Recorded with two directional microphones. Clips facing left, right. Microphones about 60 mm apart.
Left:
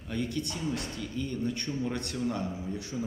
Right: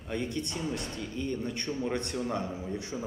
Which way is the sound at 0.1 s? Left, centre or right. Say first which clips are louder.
Even; right.